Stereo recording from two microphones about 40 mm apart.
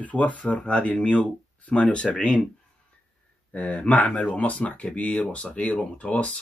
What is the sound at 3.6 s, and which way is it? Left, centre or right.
Speech, left.